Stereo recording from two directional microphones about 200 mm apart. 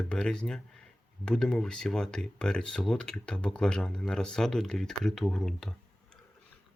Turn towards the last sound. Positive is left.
turn(degrees=0)  # may be behind; listen again after turning